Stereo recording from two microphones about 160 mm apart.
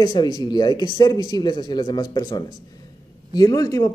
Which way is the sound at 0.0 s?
25° left (ahead or behind).